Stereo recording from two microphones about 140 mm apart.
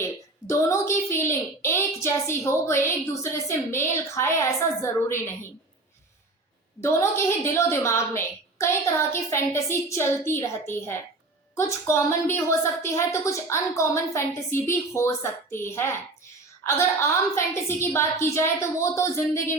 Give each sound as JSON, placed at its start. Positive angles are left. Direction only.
{"t": 0.4, "sound": "a woman's voice", "side_deg": 20}
{"t": 6.8, "sound": "a woman's voice", "side_deg": 15}